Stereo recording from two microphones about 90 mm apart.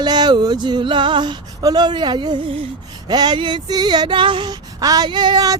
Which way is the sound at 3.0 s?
50° right (ahead or behind).